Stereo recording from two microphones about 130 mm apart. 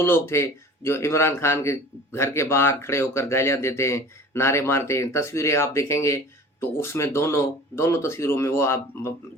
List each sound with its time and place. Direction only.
0.0 s speech: 20° left (ahead or behind)